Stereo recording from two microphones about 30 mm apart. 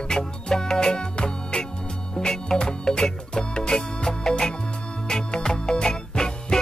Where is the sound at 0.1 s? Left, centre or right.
Left.